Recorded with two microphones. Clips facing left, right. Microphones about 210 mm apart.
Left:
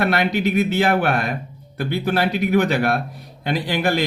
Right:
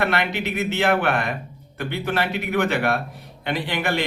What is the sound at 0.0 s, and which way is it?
Speech, 40° left (ahead or behind).